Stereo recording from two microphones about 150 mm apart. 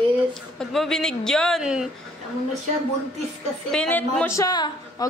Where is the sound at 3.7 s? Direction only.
10° left (ahead or behind); by 5.0 s 25° left (ahead or behind).